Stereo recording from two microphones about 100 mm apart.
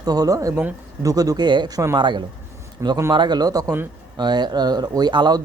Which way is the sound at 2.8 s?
30° right (ahead or behind).